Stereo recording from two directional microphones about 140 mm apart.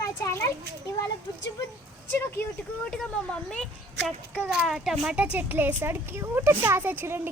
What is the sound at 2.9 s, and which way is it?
Speech, 5° left (ahead or behind).